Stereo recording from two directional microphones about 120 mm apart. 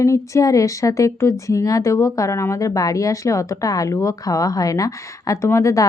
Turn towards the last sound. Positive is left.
turn(degrees=25)  # may be behind; listen again after turning